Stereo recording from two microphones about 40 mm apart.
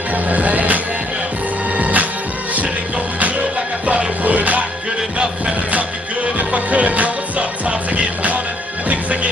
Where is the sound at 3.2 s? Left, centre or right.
Right.